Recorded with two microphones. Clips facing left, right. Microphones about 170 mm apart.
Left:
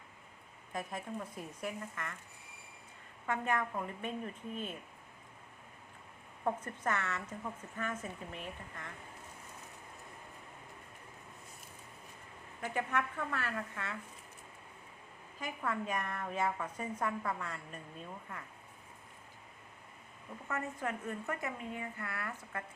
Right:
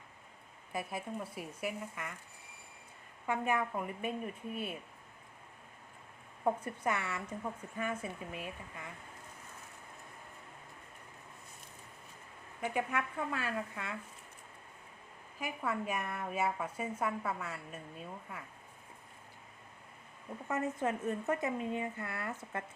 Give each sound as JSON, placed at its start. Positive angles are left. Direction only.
{"t": 0.7, "sound": "a woman's voice", "side_deg": -10}
{"t": 3.2, "sound": "a woman's voice", "side_deg": -10}
{"t": 6.4, "sound": "a woman's voice", "side_deg": -10}
{"t": 12.6, "sound": "a woman's voice", "side_deg": -10}
{"t": 15.4, "sound": "a woman's voice", "side_deg": -10}
{"t": 20.5, "sound": "a woman's voice", "side_deg": -20}